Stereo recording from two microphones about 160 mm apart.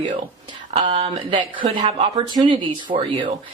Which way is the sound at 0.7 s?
35° right (ahead or behind).